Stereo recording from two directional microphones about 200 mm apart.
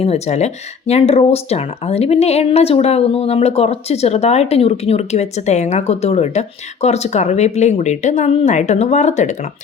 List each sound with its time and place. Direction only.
0.0 s speech: 30° left (ahead or behind)